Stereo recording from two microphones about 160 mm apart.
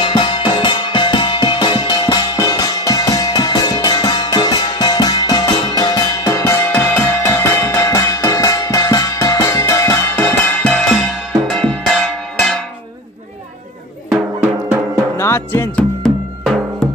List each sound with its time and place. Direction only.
0.0 s music: 30° left (ahead or behind); by 11.1 s 5° left (ahead or behind)
11.5 s church bell: 5° left (ahead or behind)
15.1 s music: 15° left (ahead or behind)
16.0 s music: centre (ahead or behind)